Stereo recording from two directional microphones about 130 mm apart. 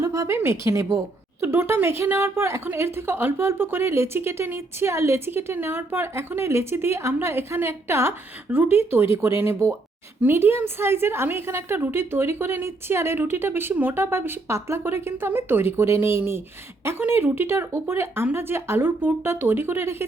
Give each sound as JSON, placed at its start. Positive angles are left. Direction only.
{"t": 0.0, "sound": "a woman's voice", "side_deg": -25}